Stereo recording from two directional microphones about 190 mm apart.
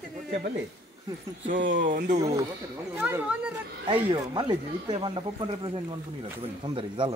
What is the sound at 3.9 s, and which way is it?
Speech, 25° right (ahead or behind).